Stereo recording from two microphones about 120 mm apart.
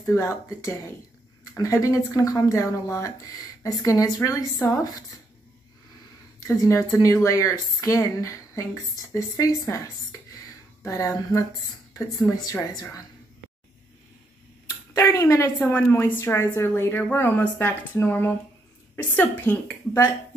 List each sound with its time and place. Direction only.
0.1 s speech: 25° left (ahead or behind)
6.4 s speech: 25° left (ahead or behind)
10.8 s speech: 25° left (ahead or behind)
12.2 s speech: 30° left (ahead or behind)
15.0 s speech: 25° left (ahead or behind)